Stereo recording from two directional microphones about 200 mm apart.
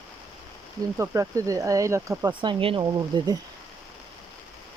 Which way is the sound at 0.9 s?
15° right (ahead or behind).